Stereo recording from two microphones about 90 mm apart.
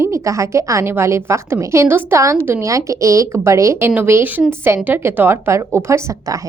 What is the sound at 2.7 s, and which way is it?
A woman's voice, 35° right (ahead or behind).